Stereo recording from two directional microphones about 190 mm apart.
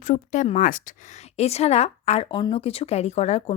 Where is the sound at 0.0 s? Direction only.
40° left (ahead or behind).